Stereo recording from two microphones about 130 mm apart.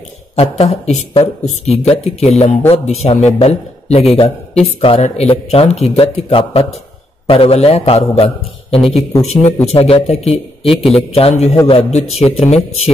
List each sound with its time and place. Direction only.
0.4 s a man's voice: 55° left (ahead or behind)